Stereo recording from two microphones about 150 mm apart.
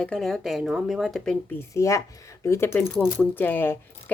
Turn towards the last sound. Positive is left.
turn(degrees=10)  # may be behind; listen again after turning